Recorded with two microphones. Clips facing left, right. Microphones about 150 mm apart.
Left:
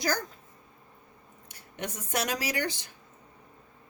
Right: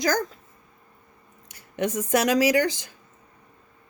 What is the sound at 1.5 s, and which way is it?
Speech, 90° right.